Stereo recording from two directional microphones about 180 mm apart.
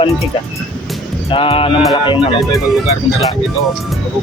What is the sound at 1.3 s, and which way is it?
Speech, 30° left (ahead or behind).